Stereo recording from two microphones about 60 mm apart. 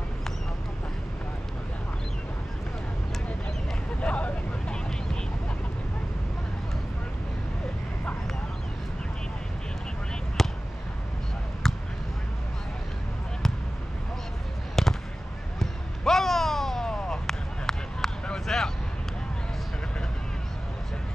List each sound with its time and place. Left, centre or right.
4.0 s vehicle: left
10.4 s basketball bounce: centre
11.6 s basketball bounce: centre
14.8 s fireworks: centre
15.6 s a sound: centre